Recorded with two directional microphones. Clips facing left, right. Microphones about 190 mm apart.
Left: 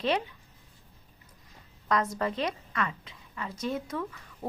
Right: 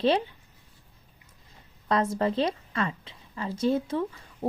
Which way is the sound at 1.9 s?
30° right (ahead or behind).